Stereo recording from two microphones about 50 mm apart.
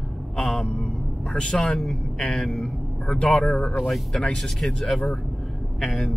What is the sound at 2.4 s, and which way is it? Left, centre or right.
Speech, centre.